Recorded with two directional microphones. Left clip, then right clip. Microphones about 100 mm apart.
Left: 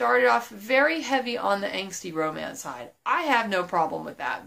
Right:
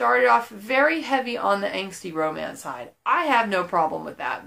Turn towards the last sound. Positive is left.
turn(degrees=25)  # may be behind; listen again after turning